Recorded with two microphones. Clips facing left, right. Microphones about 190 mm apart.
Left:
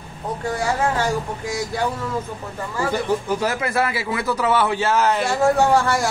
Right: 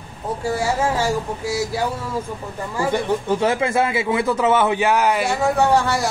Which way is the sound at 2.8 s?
25° right (ahead or behind).